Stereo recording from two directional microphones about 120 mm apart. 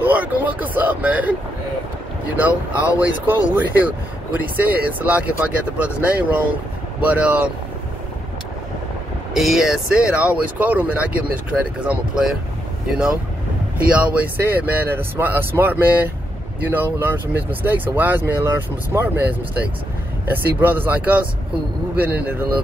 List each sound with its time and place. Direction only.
0.0 s vehicle: 15° right (ahead or behind)
2.2 s speech: 15° right (ahead or behind)
9.3 s speech: 5° right (ahead or behind)
14.0 s speech: 15° right (ahead or behind)